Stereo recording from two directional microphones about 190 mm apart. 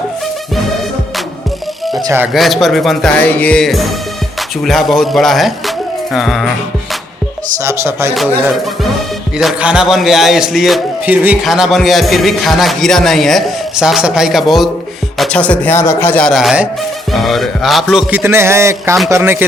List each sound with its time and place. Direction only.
2.0 s music: 20° right (ahead or behind)
2.2 s a man's voice: centre (ahead or behind)
7.6 s speech: 15° right (ahead or behind)
8.1 s a man's voice: centre (ahead or behind)